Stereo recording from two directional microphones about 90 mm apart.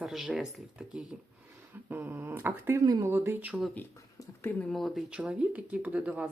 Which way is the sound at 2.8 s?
50° right (ahead or behind).